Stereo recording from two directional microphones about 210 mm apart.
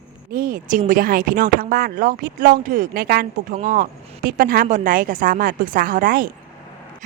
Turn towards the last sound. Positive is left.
turn(degrees=-40)  # may be behind; listen again after turning